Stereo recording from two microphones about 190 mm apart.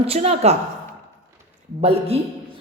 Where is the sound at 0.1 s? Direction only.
35° right (ahead or behind).